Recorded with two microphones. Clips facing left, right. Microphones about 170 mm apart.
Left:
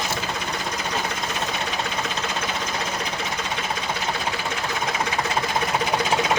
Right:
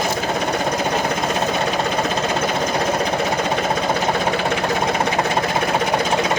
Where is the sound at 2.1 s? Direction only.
55° right (ahead or behind).